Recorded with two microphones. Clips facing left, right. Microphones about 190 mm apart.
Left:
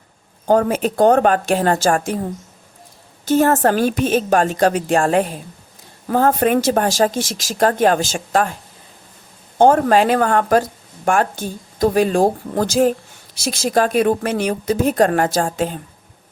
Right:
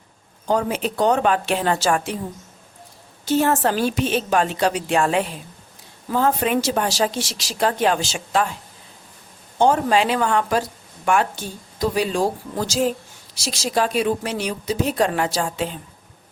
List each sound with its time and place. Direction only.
0.4 s speech: 50° left (ahead or behind)
3.2 s speech: 50° left (ahead or behind)
9.6 s speech: 50° left (ahead or behind)